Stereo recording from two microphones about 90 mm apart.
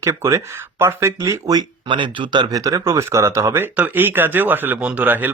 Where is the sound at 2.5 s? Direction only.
40° right (ahead or behind).